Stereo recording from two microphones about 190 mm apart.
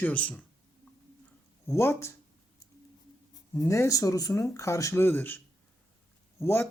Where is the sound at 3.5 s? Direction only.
15° left (ahead or behind).